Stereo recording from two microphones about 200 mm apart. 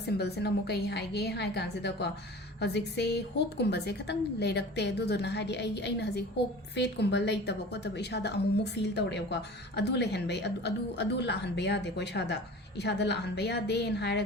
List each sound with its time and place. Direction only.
0.2 s a woman's voice: 55° left (ahead or behind)